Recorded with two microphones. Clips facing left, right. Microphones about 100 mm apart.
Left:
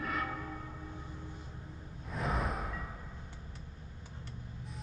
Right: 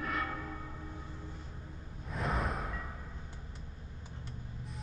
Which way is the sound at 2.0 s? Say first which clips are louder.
Even; centre (ahead or behind).